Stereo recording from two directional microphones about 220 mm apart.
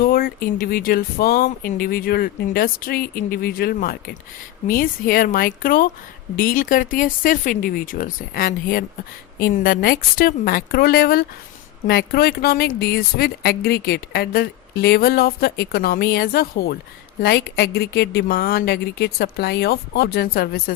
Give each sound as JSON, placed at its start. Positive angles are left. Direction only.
{"t": 0.0, "sound": "speech", "side_deg": 40}